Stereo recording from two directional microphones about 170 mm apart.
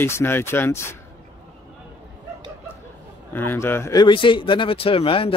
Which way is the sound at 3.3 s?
15° left (ahead or behind).